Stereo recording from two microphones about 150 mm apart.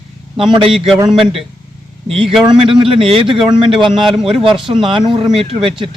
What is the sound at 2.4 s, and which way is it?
Speech, 35° right (ahead or behind).